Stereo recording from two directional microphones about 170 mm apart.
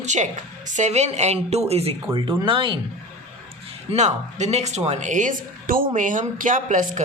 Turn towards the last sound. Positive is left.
turn(degrees=-50)  # may be behind; listen again after turning